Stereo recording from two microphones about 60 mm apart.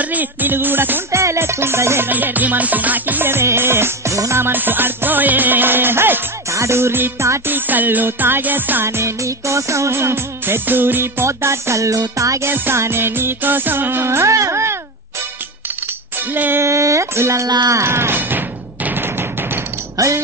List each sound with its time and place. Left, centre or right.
0.0 s music: right
1.1 s music: right
2.0 s music: right
4.1 s music: right
4.4 s music: right
6.5 s music: right
8.8 s music: right
11.2 s music: right
12.4 s music: right
16.2 s music: right
16.6 s music: right
18.9 s a sound: right
20.0 s speech: right